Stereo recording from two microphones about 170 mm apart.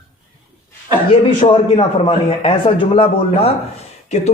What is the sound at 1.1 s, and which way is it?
A man's voice, 30° left (ahead or behind).